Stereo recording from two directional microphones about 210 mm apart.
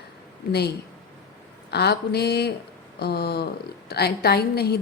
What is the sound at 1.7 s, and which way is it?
A woman's voice, 50° left (ahead or behind).